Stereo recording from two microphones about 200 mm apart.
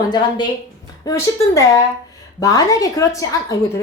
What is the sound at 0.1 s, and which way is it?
A woman's voice, 20° left (ahead or behind).